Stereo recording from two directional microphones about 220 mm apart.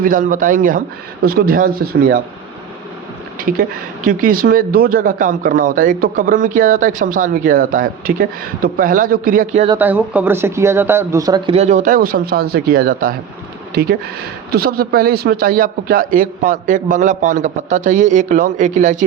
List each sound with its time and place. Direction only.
0.0 s a man's voice: 35° right (ahead or behind)
3.3 s a man's voice: 40° right (ahead or behind)
9.7 s speech: 10° right (ahead or behind); by 13.1 s 40° right (ahead or behind)
14.5 s a man's voice: 45° right (ahead or behind)